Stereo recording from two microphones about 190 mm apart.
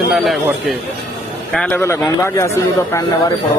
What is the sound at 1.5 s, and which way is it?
Speech, 10° left (ahead or behind).